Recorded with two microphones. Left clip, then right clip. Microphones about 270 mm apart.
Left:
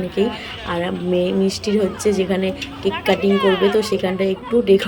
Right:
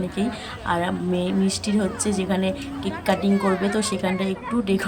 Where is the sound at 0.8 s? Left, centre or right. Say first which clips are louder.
Left 6 dB; centre.